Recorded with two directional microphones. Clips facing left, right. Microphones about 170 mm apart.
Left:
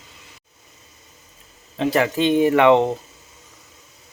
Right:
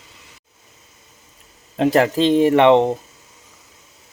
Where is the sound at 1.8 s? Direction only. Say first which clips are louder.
Right 4 dB; 40° right (ahead or behind); by 3.0 s 20° right (ahead or behind).